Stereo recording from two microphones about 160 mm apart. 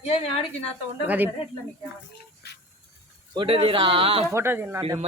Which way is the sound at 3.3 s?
35° right (ahead or behind).